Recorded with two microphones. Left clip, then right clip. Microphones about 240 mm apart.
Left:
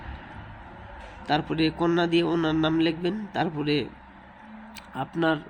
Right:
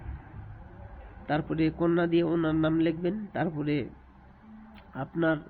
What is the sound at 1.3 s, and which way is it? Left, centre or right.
Speech, centre.